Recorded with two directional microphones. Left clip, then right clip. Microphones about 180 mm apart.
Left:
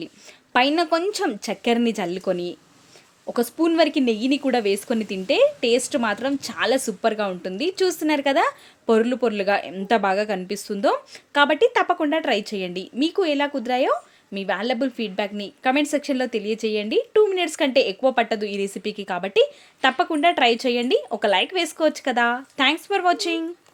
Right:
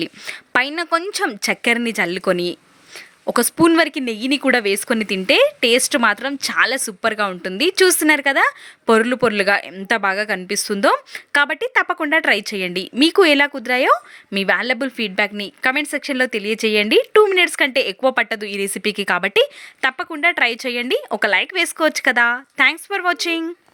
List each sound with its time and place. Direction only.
0.0 s a woman's voice: 15° right (ahead or behind)